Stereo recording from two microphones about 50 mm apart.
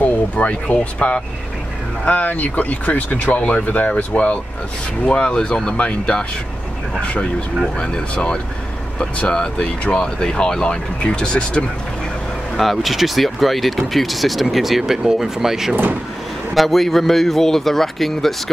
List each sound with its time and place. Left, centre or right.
0.0 s speech: left
9.0 s speech: centre
12.5 s speech: centre
15.7 s speech: right
16.5 s speech: centre